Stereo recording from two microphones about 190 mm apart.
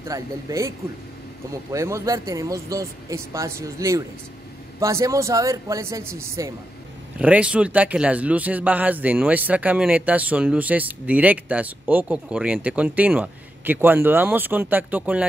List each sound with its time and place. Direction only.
0.0 s speech: 15° right (ahead or behind)